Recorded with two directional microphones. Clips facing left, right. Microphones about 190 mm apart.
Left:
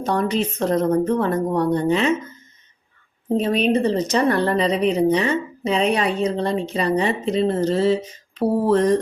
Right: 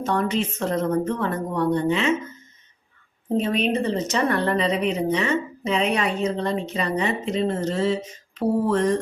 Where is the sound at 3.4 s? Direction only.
35° left (ahead or behind).